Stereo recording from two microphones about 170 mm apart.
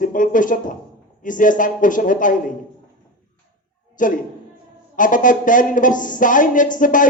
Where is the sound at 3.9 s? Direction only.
50° left (ahead or behind).